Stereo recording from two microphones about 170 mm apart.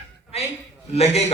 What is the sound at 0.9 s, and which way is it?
Speech, 40° left (ahead or behind).